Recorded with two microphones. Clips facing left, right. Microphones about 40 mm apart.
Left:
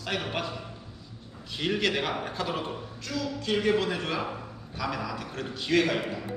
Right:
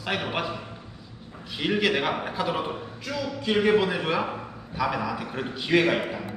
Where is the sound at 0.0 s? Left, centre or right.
Centre.